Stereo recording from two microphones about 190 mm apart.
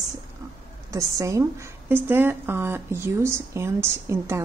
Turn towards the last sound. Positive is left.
turn(degrees=-15)  # may be behind; listen again after turning